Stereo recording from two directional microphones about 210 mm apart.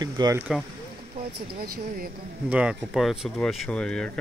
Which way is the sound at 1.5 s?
45° right (ahead or behind).